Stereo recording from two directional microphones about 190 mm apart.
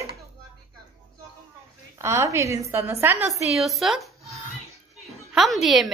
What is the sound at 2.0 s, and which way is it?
A woman's voice, 15° right (ahead or behind).